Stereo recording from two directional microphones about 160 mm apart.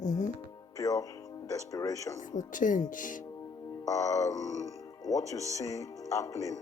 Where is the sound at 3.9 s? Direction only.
20° left (ahead or behind).